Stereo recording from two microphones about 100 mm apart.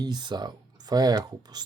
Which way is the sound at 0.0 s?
45° right (ahead or behind).